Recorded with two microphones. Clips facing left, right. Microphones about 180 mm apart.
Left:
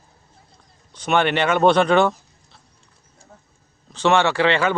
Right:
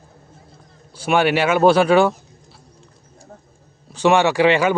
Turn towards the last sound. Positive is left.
turn(degrees=-10)  # may be behind; listen again after turning